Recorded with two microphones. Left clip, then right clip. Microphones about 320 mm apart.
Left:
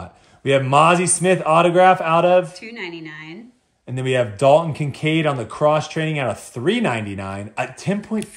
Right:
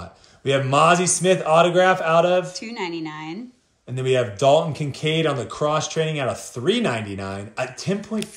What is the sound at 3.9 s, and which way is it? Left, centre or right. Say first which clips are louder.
Speech: left 1 dB; left.